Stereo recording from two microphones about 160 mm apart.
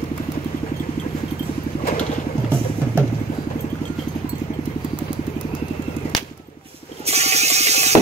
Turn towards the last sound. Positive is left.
turn(degrees=-45)  # may be behind; listen again after turning